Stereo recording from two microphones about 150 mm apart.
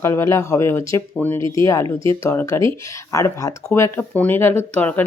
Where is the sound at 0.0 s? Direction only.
20° left (ahead or behind).